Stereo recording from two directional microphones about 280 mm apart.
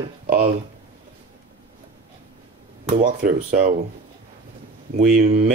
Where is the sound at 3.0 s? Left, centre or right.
Right.